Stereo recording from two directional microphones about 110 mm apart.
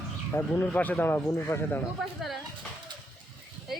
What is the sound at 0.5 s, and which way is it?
Speech, 15° left (ahead or behind).